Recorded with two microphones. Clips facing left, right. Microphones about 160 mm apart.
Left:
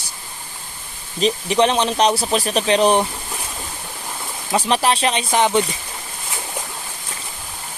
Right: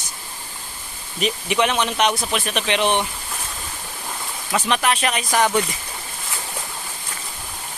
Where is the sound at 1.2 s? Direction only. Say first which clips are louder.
Left 4 dB; 30° left (ahead or behind).